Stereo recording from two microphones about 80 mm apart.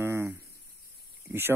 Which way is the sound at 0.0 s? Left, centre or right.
Right.